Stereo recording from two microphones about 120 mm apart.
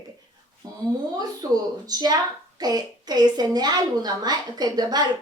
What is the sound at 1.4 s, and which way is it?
A woman's voice, 30° right (ahead or behind).